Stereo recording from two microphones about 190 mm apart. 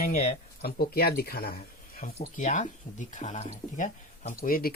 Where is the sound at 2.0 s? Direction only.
40° left (ahead or behind).